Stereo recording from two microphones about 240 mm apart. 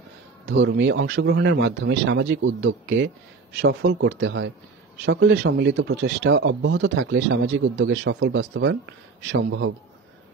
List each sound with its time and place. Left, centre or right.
0.5 s speech: right